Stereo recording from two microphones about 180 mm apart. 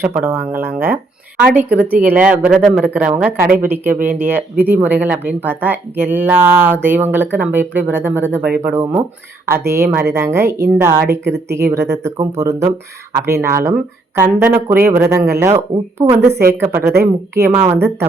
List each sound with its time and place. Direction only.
0.0 s speech: 10° right (ahead or behind)